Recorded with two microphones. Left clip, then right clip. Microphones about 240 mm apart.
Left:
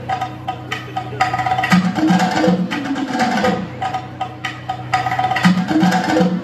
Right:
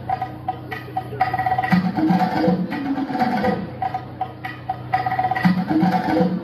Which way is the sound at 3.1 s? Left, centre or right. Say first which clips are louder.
Left 4 dB; left.